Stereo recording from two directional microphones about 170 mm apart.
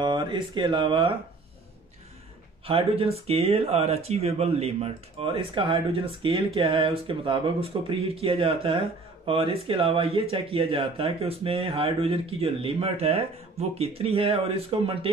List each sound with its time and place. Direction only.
0.0 s speech: 25° right (ahead or behind)
2.6 s speech: 35° right (ahead or behind)